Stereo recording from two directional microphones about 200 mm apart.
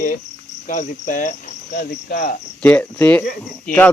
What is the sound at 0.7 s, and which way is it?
Cricket, 40° left (ahead or behind).